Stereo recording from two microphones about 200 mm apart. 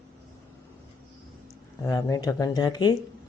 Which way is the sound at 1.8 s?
20° left (ahead or behind).